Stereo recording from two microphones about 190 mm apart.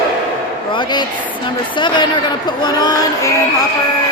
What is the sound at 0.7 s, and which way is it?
Music, 25° left (ahead or behind).